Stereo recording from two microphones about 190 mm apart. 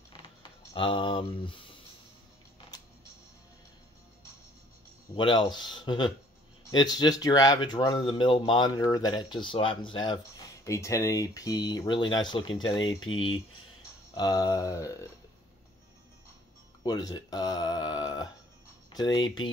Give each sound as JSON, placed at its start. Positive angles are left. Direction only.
{"t": 0.1, "sound": "typing", "side_deg": 25}
{"t": 5.1, "sound": "speech", "side_deg": 25}
{"t": 12.7, "sound": "speech", "side_deg": 90}
{"t": 14.1, "sound": "speech", "side_deg": 20}
{"t": 16.8, "sound": "speech", "side_deg": 20}